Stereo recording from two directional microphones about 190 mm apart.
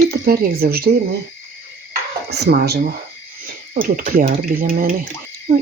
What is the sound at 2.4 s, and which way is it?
Speech, 60° right (ahead or behind).